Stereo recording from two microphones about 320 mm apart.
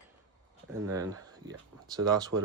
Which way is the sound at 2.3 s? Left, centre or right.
Right.